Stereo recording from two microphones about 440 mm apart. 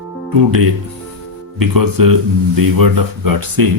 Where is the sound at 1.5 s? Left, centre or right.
Right.